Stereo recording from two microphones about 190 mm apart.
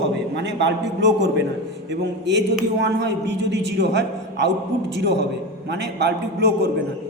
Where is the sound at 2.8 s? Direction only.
65° right (ahead or behind).